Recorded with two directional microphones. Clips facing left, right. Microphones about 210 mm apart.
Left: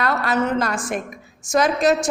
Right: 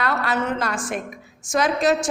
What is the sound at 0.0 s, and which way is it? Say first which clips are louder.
A woman's voice: left 3 dB; 45° left (ahead or behind).